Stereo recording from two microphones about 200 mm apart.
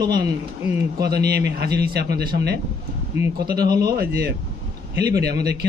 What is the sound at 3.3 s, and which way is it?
Speech, 50° right (ahead or behind).